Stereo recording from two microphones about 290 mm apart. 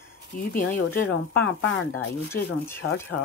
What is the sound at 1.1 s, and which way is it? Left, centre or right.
Speech, left.